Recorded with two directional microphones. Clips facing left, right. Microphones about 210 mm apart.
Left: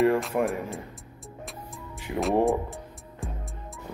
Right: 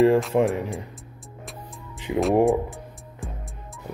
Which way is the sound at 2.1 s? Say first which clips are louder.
Right 6 dB; 15° right (ahead or behind).